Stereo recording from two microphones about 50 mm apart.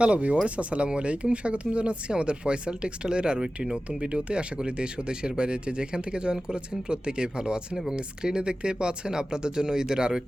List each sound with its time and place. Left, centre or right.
0.0 s speech: right